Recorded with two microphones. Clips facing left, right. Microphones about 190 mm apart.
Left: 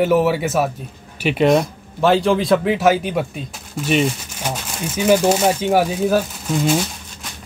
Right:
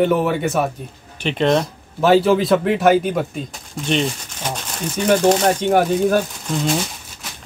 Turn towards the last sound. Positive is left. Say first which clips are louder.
# left 2 dB
turn(degrees=5)  # may be behind; listen again after turning